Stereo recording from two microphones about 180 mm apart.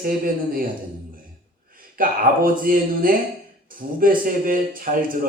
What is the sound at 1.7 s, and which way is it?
A man's voice, 50° right (ahead or behind).